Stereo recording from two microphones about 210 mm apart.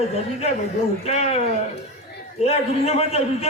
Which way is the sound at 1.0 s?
30° left (ahead or behind).